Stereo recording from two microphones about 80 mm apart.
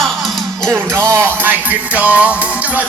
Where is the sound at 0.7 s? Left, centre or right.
Right.